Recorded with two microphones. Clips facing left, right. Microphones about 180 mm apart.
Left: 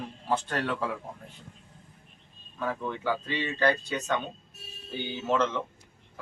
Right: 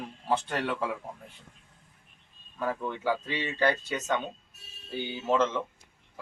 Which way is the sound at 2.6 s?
5° right (ahead or behind).